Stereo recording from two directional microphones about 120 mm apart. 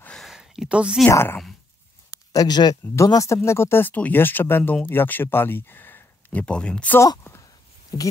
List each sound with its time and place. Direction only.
0.0 s a sound: 5° left (ahead or behind)
1.0 s speech: 20° left (ahead or behind)
2.3 s speech: 35° left (ahead or behind); by 7.0 s 10° left (ahead or behind)
7.0 s a woman's voice: 25° left (ahead or behind)